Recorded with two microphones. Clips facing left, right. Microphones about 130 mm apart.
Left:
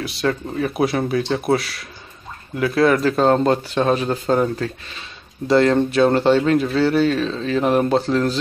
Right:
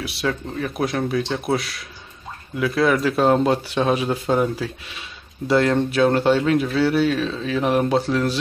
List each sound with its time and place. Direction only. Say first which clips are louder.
0.0 s speech: left 3 dB; 5° right (ahead or behind)